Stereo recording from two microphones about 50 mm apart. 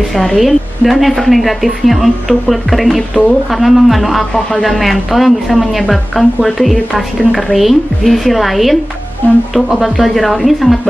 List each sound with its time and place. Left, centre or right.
0.4 s a woman's voice: centre
9.2 s speech: left
9.7 s a woman's voice: centre